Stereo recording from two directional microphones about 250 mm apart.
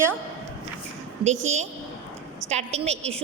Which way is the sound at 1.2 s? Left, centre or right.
Right.